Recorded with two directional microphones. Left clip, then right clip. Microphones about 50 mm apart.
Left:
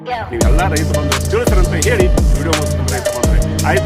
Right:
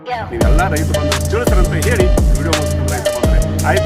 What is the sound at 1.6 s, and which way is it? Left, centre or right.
Music, right.